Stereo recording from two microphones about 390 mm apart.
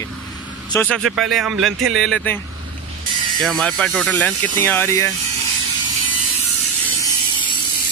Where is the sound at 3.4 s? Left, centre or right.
Centre.